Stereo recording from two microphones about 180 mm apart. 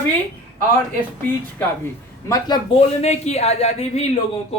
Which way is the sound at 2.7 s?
35° left (ahead or behind).